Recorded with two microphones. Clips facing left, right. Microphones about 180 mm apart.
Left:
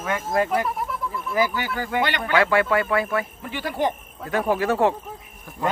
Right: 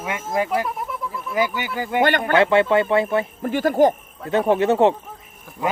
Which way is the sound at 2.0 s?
50° right (ahead or behind).